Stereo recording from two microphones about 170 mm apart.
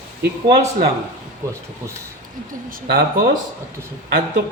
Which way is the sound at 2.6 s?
55° right (ahead or behind).